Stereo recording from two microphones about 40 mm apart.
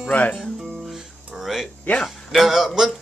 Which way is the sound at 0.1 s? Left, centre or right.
Left.